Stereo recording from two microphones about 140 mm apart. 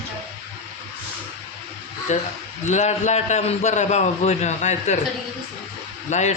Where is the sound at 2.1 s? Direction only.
55° left (ahead or behind).